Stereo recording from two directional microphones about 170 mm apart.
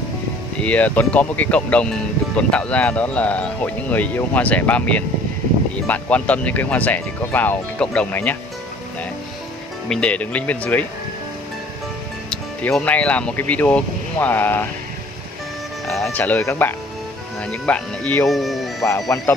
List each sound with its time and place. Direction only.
0.6 s speech: 10° left (ahead or behind)
9.8 s speech: 5° left (ahead or behind)
12.3 s speech: 5° left (ahead or behind)
15.9 s speech: 5° left (ahead or behind)
19.1 s speech: 10° left (ahead or behind)